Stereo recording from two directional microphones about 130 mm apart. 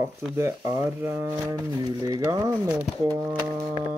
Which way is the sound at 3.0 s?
25° right (ahead or behind).